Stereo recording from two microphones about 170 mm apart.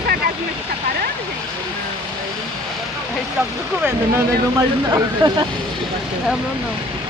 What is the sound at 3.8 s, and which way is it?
Speech, 15° right (ahead or behind).